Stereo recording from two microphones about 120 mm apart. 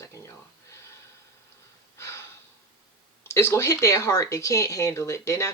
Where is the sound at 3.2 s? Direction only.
20° left (ahead or behind).